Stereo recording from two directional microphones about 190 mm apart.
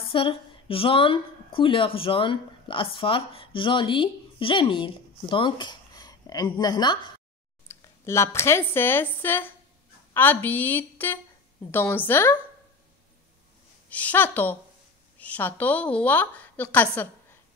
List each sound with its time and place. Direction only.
0.1 s a woman's voice: 30° left (ahead or behind); by 12.4 s 10° left (ahead or behind)
13.8 s a woman's voice: 10° left (ahead or behind)